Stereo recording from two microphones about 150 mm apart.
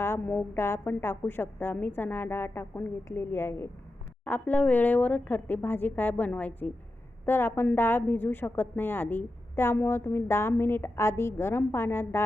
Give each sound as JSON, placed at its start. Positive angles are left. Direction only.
{"t": 0.0, "sound": "a woman's voice", "side_deg": 15}